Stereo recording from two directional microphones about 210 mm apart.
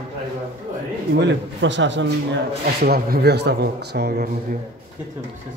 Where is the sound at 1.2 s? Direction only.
55° right (ahead or behind).